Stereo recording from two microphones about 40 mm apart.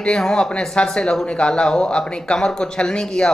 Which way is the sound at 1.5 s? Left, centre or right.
Centre.